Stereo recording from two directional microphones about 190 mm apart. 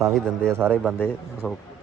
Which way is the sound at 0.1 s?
5° left (ahead or behind).